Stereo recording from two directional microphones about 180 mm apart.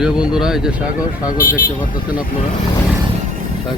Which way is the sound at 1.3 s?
50° left (ahead or behind).